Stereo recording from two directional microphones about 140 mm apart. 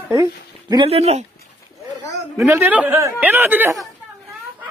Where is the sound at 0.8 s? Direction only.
45° right (ahead or behind).